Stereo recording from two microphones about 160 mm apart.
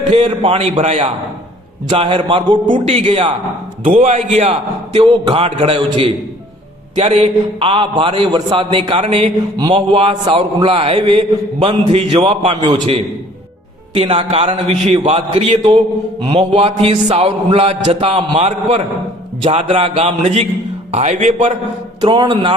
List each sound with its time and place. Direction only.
0.1 s a man's voice: 40° right (ahead or behind)
2.8 s a man's voice: 40° right (ahead or behind)
9.6 s a man's voice: 30° right (ahead or behind)
16.2 s a man's voice: 30° right (ahead or behind)
16.5 s a man's voice: 45° right (ahead or behind)
22.0 s a man's voice: 30° right (ahead or behind)